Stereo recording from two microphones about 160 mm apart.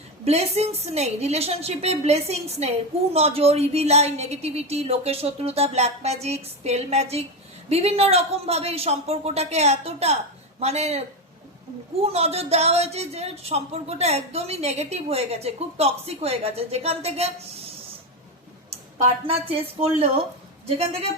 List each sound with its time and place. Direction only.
0.3 s a woman's voice: 40° right (ahead or behind)
12.0 s a woman's voice: 40° right (ahead or behind)
19.2 s a woman's voice: 35° right (ahead or behind)